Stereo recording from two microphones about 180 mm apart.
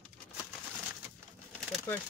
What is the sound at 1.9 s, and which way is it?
Speech, 15° left (ahead or behind).